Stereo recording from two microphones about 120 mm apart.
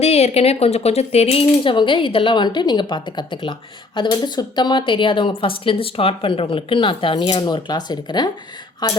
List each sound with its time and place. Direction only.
0.0 s speech: 60° left (ahead or behind); by 7.3 s 45° left (ahead or behind)
7.4 s speech: 35° left (ahead or behind)